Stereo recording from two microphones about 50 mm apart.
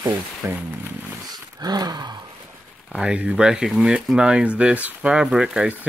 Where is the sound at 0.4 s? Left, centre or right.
Right.